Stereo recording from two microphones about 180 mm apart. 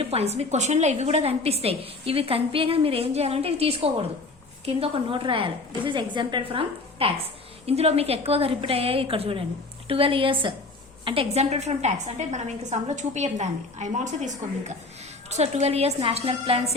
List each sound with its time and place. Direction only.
0.0 s a woman's voice: 35° right (ahead or behind)